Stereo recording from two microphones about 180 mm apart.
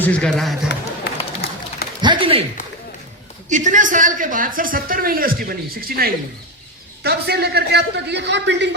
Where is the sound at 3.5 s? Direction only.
45° right (ahead or behind).